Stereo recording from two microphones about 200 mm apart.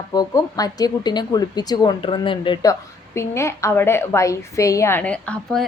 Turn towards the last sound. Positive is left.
turn(degrees=5)  # may be behind; listen again after turning